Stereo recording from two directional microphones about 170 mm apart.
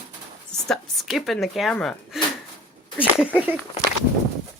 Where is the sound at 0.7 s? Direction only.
Centre (ahead or behind).